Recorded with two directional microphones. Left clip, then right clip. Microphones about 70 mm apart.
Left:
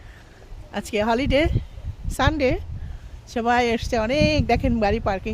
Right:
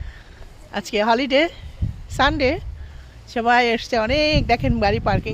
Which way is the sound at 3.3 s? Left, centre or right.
Left.